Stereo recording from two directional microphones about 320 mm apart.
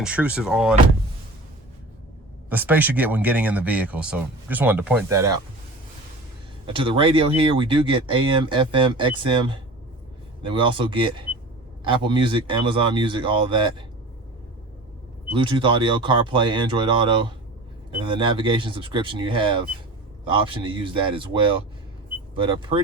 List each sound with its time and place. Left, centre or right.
0.0 s speech: centre
2.5 s speech: centre
6.7 s speech: centre
15.3 s speech: centre